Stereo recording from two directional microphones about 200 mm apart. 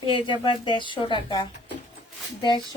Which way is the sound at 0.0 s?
25° left (ahead or behind).